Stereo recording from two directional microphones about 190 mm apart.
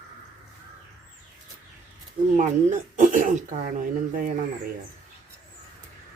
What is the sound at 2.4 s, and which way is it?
Speech, 40° right (ahead or behind).